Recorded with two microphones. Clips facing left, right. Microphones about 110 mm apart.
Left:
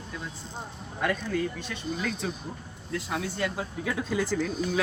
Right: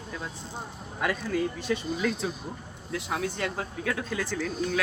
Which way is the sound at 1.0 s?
5° right (ahead or behind).